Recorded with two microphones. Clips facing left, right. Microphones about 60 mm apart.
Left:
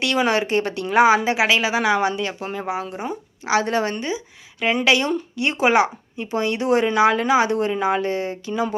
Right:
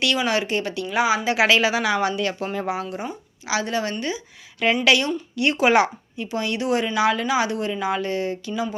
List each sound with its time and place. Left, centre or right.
0.3 s speech: left
1.4 s a woman's voice: centre
1.7 s a woman's voice: left
2.4 s a woman's voice: centre
2.6 s a woman's voice: left
3.4 s speech: left
4.8 s a woman's voice: left